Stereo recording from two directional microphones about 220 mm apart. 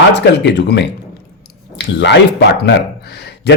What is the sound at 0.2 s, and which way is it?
Speech, 50° left (ahead or behind).